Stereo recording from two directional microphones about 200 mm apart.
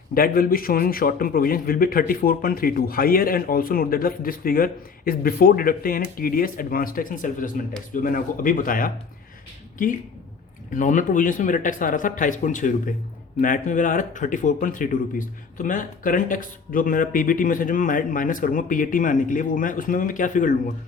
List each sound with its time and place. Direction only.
0.1 s a man's voice: 45° left (ahead or behind)
10.8 s a man's voice: 40° left (ahead or behind)